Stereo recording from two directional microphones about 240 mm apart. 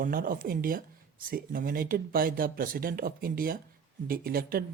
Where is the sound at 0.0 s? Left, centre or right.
Right.